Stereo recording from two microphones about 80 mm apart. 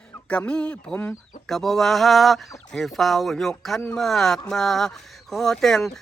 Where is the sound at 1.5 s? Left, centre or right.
Centre.